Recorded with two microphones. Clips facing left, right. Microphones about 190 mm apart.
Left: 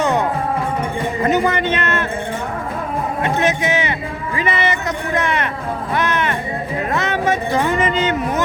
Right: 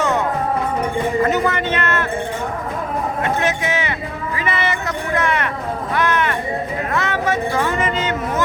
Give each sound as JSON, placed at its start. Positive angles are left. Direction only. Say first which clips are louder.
{"t": 0.0, "sound": "music", "louder": "left 2 dB", "side_deg": 15}
{"t": 1.2, "sound": "speech", "louder": "left 5 dB", "side_deg": 20}
{"t": 3.2, "sound": "a man's voice", "louder": "left 4 dB", "side_deg": 20}
{"t": 4.4, "sound": "a sound", "louder": "left 3 dB", "side_deg": 20}
{"t": 5.9, "sound": "music", "louder": "right 1 dB", "side_deg": 20}
{"t": 6.9, "sound": "speech", "louder": "left 1 dB", "side_deg": 20}